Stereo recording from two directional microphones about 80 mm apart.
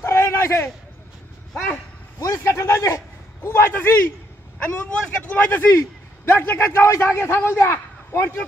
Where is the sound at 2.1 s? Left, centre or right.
Left.